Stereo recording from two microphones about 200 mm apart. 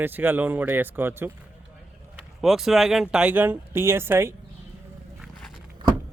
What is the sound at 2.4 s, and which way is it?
Speech, centre (ahead or behind).